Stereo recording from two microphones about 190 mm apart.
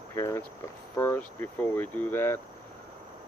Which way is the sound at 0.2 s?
15° left (ahead or behind).